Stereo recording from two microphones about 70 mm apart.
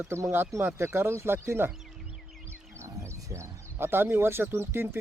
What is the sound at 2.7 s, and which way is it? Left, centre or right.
Speech, right.